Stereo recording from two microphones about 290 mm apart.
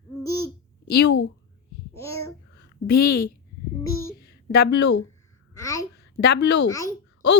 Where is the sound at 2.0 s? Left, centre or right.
Centre.